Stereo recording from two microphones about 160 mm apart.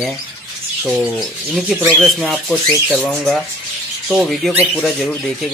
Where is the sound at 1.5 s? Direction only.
Centre (ahead or behind).